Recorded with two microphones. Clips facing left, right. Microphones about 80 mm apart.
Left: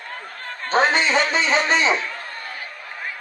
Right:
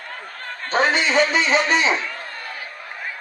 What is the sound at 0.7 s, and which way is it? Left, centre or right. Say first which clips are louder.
Speech: left 1 dB; left.